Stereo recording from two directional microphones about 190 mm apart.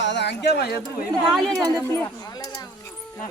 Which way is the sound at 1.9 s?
15° left (ahead or behind).